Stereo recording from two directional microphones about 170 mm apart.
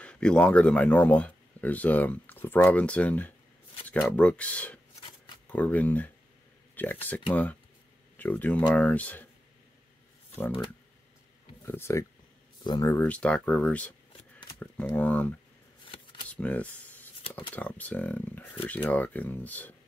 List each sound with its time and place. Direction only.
0.0 s speech: 5° left (ahead or behind)
8.2 s speech: 10° left (ahead or behind)
11.6 s speech: 15° left (ahead or behind)
14.5 s a sound: 10° left (ahead or behind)
15.0 s speech: 10° left (ahead or behind)
16.3 s a sound: 10° left (ahead or behind)
17.6 s speech: 10° left (ahead or behind)